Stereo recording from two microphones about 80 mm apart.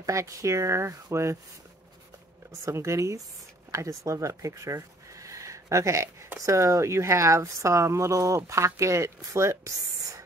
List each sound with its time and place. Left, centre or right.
0.0 s speech: right
2.6 s speech: right